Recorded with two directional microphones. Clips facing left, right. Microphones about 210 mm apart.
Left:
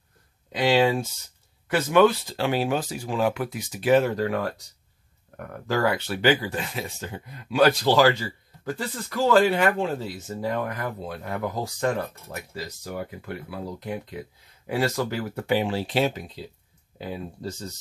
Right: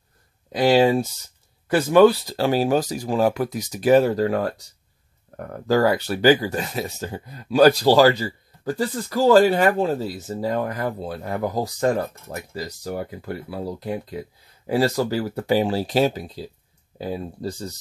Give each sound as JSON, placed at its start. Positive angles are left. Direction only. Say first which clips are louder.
{"t": 0.5, "sound": "speech", "louder": "right 4 dB", "side_deg": -40}